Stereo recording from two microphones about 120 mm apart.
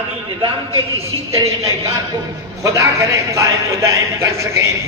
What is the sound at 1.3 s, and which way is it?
A man's voice, 25° right (ahead or behind).